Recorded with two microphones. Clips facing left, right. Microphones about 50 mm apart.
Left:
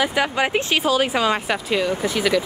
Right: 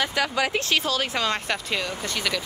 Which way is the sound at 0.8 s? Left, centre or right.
Centre.